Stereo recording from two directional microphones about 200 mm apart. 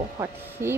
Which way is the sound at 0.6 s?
10° right (ahead or behind).